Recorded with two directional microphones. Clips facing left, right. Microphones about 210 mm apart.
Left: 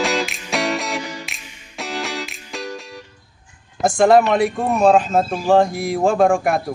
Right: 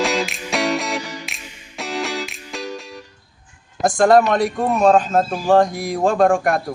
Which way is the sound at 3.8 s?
Centre (ahead or behind).